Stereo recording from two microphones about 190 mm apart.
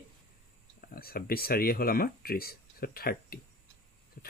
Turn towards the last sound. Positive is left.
turn(degrees=45)  # may be behind; listen again after turning